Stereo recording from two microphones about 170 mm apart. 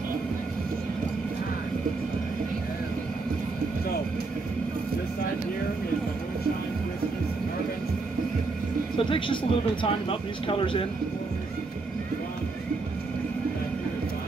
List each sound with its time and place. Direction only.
8.9 s speech: 30° left (ahead or behind)